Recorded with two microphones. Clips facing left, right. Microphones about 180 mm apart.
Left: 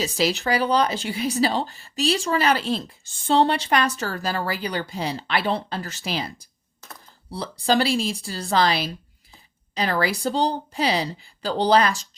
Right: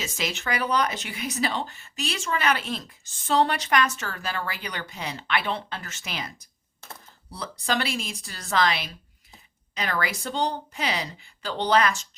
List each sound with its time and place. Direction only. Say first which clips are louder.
0.0 s speech: left 8 dB; 35° left (ahead or behind)